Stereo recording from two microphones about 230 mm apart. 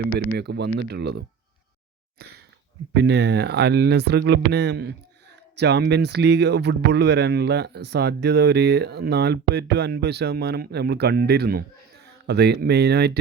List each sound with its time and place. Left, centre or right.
0.3 s speech: right
2.9 s speech: right